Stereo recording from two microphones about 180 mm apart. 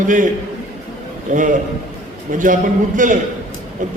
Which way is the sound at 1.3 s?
45° right (ahead or behind).